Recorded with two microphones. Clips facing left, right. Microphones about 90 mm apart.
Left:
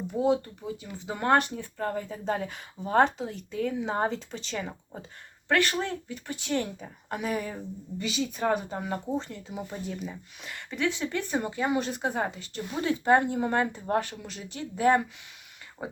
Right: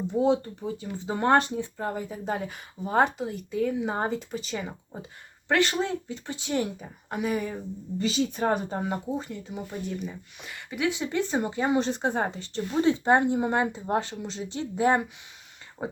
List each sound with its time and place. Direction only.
0.1 s speech: 25° right (ahead or behind); by 4.9 s 5° right (ahead or behind)
5.5 s speech: 20° right (ahead or behind); by 7.6 s centre (ahead or behind)
7.9 s a woman's voice: 35° right (ahead or behind)
9.0 s speech: 5° right (ahead or behind); by 15.9 s 25° right (ahead or behind)